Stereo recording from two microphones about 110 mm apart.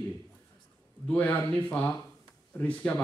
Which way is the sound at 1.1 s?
15° left (ahead or behind).